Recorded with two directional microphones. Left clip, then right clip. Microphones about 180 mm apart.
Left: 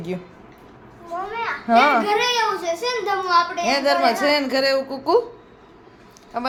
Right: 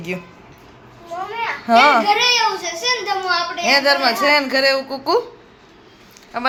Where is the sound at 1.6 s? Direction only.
10° left (ahead or behind).